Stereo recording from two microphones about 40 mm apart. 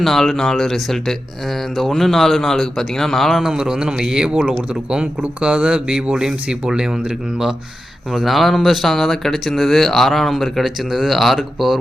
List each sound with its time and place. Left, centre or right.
0.0 s speech: centre
3.4 s speech: centre
8.1 s speech: centre